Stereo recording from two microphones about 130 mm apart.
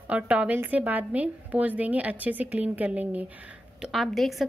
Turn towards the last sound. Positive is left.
turn(degrees=0)  # may be behind; listen again after turning